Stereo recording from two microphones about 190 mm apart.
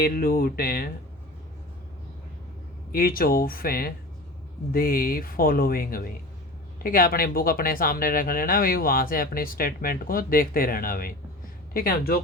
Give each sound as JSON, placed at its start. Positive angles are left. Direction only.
{"t": 0.0, "sound": "speech", "side_deg": 50}
{"t": 2.9, "sound": "speech", "side_deg": 50}